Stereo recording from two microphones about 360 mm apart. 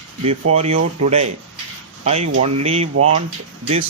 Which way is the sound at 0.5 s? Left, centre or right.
Centre.